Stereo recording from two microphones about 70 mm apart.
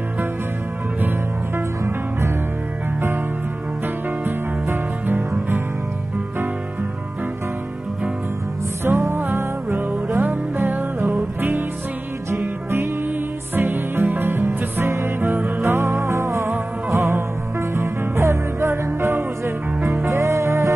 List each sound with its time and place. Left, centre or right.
3.8 s music: right
8.8 s music: right
16.4 s music: right